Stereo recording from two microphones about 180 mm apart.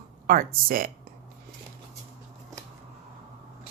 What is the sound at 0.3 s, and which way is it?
Speech, 55° right (ahead or behind).